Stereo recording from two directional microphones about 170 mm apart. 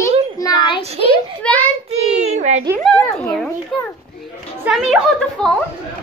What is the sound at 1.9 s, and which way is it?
Child singing, 40° right (ahead or behind).